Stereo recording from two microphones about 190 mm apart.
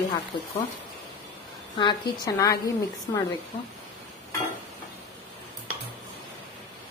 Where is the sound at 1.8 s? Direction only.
20° left (ahead or behind).